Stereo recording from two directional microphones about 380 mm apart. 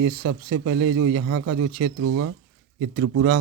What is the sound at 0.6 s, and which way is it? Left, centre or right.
Speech, right.